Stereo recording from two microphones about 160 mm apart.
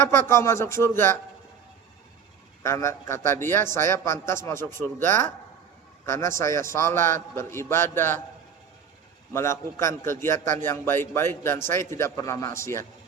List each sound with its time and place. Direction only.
0.3 s a man's voice: 15° left (ahead or behind)
2.6 s a man's voice: 15° left (ahead or behind)
9.3 s a man's voice: 15° left (ahead or behind)